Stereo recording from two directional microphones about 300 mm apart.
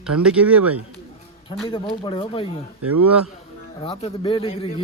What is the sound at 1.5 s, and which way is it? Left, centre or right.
Speech, centre.